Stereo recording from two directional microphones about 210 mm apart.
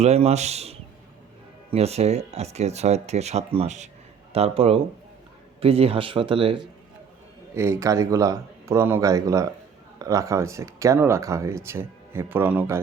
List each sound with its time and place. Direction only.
0.0 s speech: 30° right (ahead or behind)
7.5 s speech: 15° right (ahead or behind)